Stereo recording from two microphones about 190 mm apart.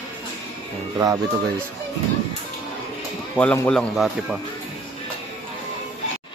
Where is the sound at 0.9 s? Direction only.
15° right (ahead or behind).